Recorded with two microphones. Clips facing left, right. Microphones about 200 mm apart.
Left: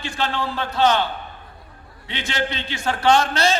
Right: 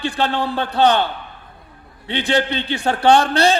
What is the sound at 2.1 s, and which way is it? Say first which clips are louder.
A man's voice: right 7 dB; 35° right (ahead or behind).